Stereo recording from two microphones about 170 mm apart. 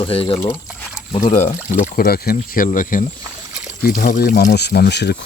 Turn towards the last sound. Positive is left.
turn(degrees=80)